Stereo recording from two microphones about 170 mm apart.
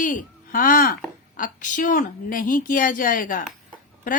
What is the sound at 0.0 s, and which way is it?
Speech, 50° left (ahead or behind).